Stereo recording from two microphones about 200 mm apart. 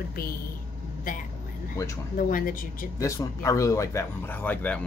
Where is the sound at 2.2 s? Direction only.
45° left (ahead or behind).